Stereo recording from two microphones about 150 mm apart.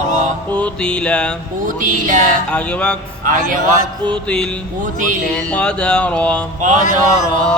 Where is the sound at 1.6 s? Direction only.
65° right (ahead or behind).